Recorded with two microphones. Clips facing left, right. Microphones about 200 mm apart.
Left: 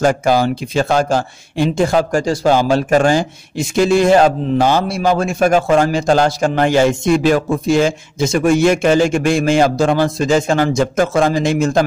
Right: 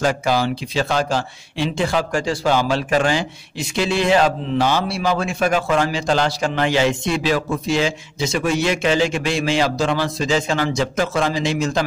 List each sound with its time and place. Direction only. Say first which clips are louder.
0.0 s speech: left 5 dB; 45° left (ahead or behind)